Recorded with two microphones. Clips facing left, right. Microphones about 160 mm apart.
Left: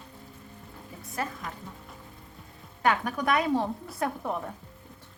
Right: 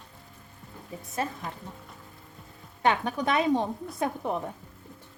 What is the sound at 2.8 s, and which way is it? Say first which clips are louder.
A woman's voice: right 1 dB; 25° right (ahead or behind).